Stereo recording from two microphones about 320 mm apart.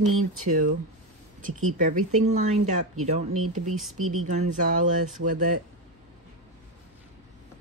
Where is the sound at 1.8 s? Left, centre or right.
Right.